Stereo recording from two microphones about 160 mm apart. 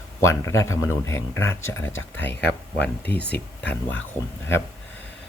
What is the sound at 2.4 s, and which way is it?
Speech, 90° left.